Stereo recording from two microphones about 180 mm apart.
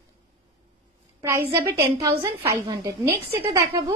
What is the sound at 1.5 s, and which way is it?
A woman's voice, 15° right (ahead or behind).